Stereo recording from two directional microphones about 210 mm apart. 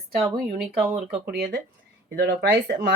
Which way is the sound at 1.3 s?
50° right (ahead or behind).